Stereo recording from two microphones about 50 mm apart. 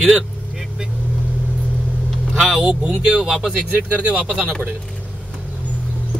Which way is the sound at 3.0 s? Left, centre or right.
Centre.